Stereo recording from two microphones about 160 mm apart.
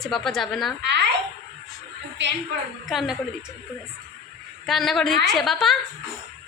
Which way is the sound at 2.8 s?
Centre (ahead or behind).